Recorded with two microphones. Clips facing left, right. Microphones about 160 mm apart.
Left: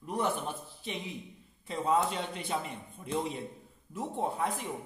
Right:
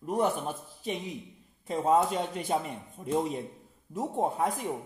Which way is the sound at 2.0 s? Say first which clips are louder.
Right 4 dB; 45° right (ahead or behind).